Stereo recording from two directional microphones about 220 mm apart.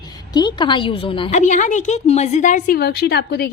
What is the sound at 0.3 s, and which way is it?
A woman's voice, 20° left (ahead or behind).